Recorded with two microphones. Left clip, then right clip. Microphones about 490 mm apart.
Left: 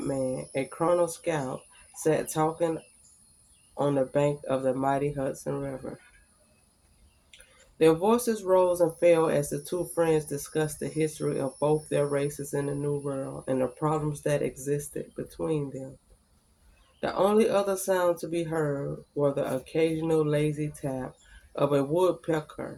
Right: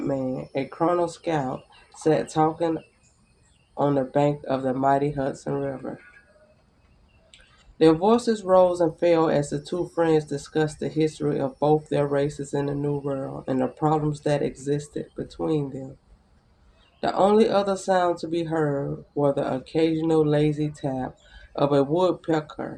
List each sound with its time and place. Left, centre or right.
0.1 s speech: left
3.8 s speech: left
7.8 s speech: left
17.0 s speech: left